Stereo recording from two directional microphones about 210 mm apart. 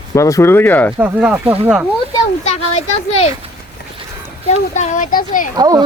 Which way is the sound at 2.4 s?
30° left (ahead or behind).